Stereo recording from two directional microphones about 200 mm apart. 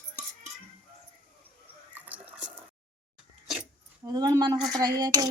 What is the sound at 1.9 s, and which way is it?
Drip, 10° right (ahead or behind).